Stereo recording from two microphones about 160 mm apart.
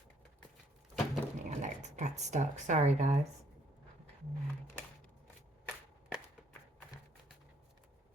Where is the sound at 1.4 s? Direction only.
50° right (ahead or behind).